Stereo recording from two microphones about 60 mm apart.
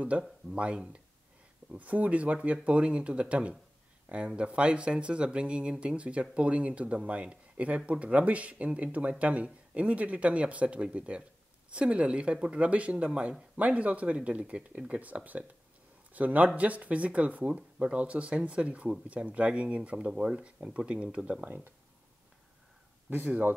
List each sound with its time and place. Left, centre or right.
0.1 s speech: right